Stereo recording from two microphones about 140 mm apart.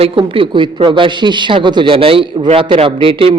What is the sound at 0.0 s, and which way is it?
A man's voice, 40° right (ahead or behind).